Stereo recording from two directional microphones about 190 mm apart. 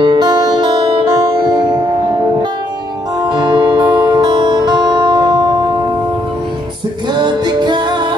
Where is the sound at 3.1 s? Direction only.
20° right (ahead or behind).